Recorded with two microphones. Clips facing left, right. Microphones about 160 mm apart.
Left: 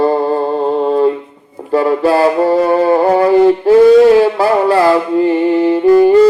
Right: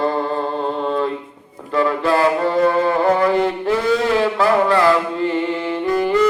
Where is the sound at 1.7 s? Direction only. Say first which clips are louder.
Left 6 dB; 35° left (ahead or behind).